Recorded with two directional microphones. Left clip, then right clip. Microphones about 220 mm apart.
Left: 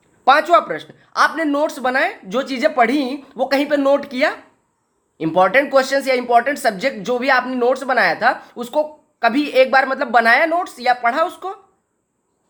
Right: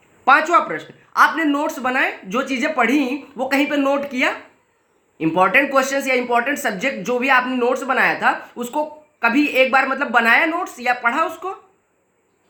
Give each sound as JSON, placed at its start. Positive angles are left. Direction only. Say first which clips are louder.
{"t": 0.3, "sound": "speech", "louder": "left 1 dB", "side_deg": 15}